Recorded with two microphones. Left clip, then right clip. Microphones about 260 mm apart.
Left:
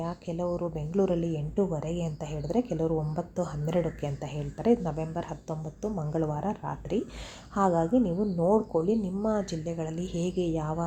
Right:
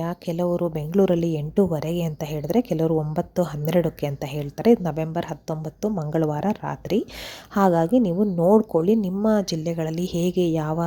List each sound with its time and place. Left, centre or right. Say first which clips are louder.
0.0 s a woman's voice: right 7 dB; right